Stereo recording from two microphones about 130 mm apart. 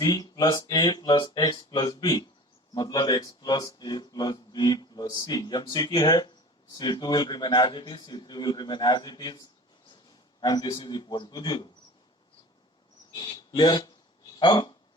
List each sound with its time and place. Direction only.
0.0 s speech: 30° left (ahead or behind)
13.1 s speech: 30° left (ahead or behind)